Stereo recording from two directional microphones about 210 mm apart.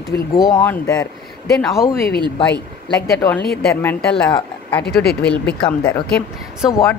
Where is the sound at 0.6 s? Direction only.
10° left (ahead or behind).